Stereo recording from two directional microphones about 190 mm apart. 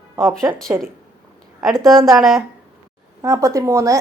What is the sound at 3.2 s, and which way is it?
Speech, 15° right (ahead or behind).